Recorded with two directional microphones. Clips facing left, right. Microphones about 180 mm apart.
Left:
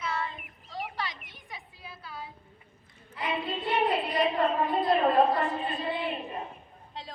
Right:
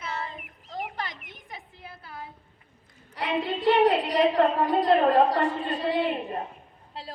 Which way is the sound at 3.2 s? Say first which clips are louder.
Right 4 dB; 75° right (ahead or behind).